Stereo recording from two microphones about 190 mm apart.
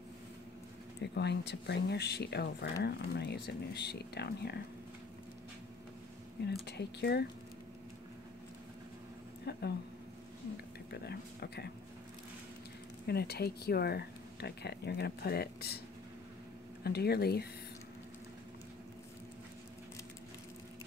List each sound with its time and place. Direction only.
1.0 s speech: 65° left (ahead or behind)
6.4 s speech: 60° left (ahead or behind)
9.5 s speech: 60° left (ahead or behind)
10.9 s speech: 60° left (ahead or behind)
13.0 s speech: 55° left (ahead or behind)
16.8 s speech: 55° left (ahead or behind)